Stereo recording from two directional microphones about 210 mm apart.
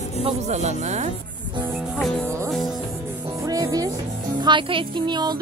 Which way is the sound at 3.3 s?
15° right (ahead or behind).